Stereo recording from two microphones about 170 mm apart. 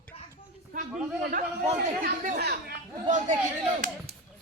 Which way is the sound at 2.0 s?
50° right (ahead or behind).